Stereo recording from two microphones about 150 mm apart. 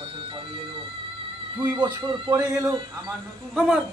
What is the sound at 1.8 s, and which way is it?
A man's voice, 30° right (ahead or behind).